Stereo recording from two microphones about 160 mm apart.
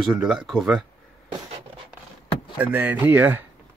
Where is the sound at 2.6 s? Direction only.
10° right (ahead or behind).